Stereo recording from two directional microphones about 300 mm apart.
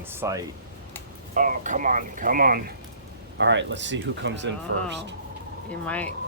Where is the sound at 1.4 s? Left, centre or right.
Right.